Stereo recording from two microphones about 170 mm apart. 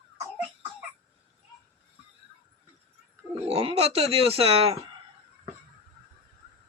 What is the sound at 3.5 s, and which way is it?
Speech, 35° right (ahead or behind).